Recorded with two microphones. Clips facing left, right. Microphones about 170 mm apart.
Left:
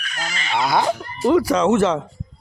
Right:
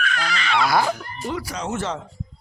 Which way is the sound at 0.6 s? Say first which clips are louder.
Left 2 dB; 20° left (ahead or behind).